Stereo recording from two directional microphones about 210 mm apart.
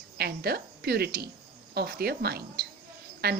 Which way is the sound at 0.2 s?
50° right (ahead or behind).